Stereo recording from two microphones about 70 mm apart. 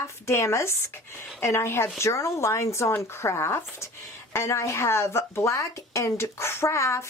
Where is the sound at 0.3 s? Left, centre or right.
Left.